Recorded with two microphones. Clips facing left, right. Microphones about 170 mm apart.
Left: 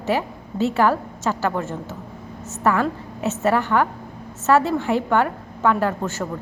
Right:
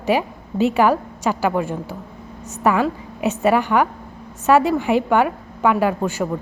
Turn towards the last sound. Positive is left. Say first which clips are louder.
# right 4 dB
turn(degrees=-15)  # may be behind; listen again after turning